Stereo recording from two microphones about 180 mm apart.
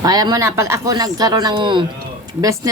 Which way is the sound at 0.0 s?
20° right (ahead or behind).